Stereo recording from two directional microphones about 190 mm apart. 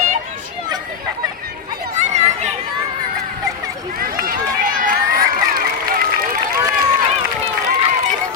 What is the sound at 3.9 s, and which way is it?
Run, 50° right (ahead or behind).